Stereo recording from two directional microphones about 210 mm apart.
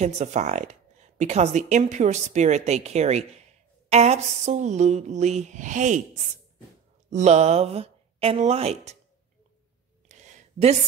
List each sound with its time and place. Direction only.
0.0 s speech: 35° right (ahead or behind)
7.1 s speech: 35° right (ahead or behind)
10.0 s a sound: 35° right (ahead or behind)